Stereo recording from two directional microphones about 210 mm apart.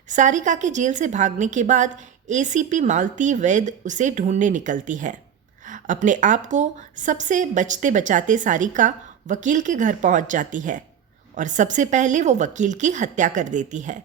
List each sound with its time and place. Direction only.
0.1 s a woman's voice: 35° right (ahead or behind)